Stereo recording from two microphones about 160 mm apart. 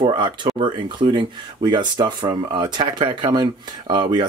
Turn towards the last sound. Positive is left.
turn(degrees=-30)  # may be behind; listen again after turning